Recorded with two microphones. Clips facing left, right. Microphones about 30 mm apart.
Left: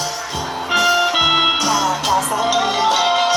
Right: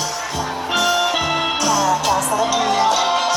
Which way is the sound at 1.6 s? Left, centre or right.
Left.